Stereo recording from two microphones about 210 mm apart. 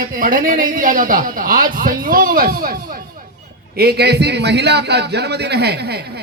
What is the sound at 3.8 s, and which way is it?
A man's voice, 50° right (ahead or behind).